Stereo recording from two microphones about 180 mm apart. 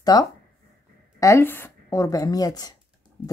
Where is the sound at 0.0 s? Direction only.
20° left (ahead or behind).